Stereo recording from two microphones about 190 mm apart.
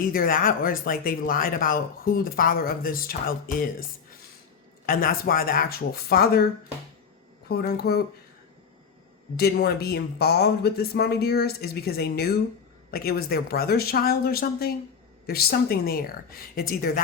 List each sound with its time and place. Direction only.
0.0 s speech: 50° left (ahead or behind)
7.4 s speech: 55° left (ahead or behind)
9.3 s speech: 55° left (ahead or behind)